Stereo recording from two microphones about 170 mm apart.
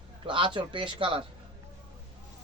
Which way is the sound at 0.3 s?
30° right (ahead or behind).